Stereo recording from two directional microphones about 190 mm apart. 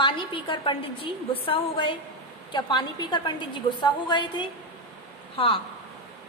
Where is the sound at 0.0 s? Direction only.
25° left (ahead or behind).